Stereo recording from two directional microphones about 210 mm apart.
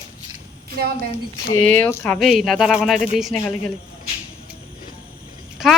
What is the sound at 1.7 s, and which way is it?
Speech, 5° left (ahead or behind).